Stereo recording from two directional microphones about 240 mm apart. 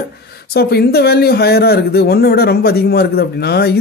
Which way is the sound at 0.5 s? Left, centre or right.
Left.